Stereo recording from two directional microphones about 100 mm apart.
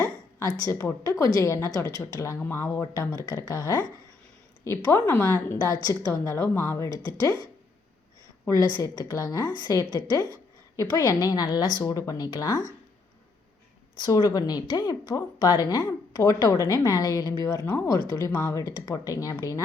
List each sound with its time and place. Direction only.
0.3 s a woman's voice: 35° left (ahead or behind)
8.4 s a woman's voice: 30° left (ahead or behind)
14.0 s a woman's voice: 35° left (ahead or behind)